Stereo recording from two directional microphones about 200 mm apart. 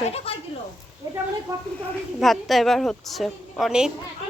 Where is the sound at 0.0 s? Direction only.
30° left (ahead or behind).